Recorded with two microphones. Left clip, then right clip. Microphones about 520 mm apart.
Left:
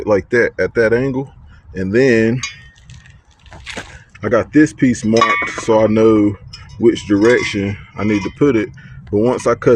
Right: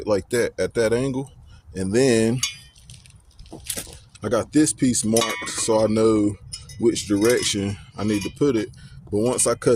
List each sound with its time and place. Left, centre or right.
0.0 s speech: right
3.8 s speech: right